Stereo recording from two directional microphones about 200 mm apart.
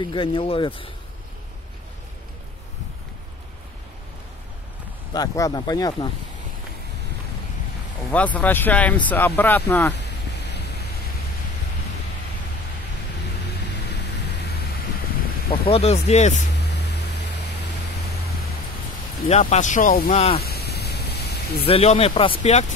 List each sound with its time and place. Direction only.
0.0 s speech: 25° left (ahead or behind)
5.1 s speech: 20° left (ahead or behind)
8.1 s speech: 5° left (ahead or behind)
15.7 s speech: 30° left (ahead or behind)
19.2 s speech: 35° left (ahead or behind)
20.2 s speech: 30° left (ahead or behind)
20.4 s a sound: 50° left (ahead or behind)
21.6 s speech: 30° left (ahead or behind)